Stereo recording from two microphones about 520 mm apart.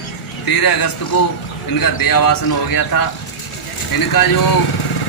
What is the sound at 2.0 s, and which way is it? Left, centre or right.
Speech, left.